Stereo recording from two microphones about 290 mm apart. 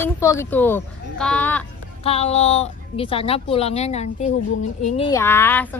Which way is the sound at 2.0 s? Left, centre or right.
Left.